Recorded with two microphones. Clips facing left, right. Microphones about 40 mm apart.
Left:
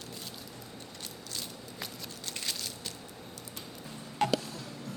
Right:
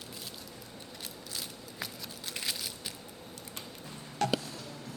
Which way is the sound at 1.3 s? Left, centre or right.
Centre.